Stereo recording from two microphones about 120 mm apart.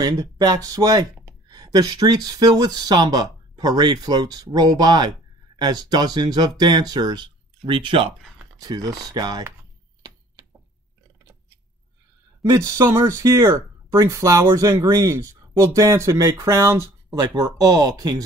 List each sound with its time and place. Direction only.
0.0 s speech: 35° right (ahead or behind)
8.5 s speech: 30° right (ahead or behind)
12.4 s speech: 25° right (ahead or behind)
17.2 s speech: 30° right (ahead or behind)